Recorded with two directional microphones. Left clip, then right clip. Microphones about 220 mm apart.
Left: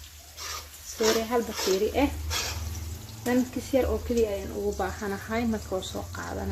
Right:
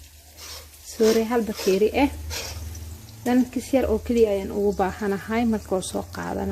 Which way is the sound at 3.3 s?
40° right (ahead or behind).